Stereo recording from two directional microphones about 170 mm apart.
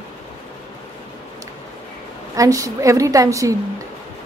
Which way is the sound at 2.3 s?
20° right (ahead or behind).